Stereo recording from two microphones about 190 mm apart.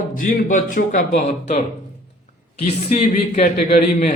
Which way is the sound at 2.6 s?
35° left (ahead or behind).